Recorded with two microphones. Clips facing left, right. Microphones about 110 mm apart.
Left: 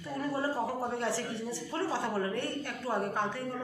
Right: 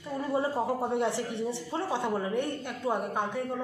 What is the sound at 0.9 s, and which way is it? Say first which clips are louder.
A woman's voice: right 4 dB; 20° right (ahead or behind).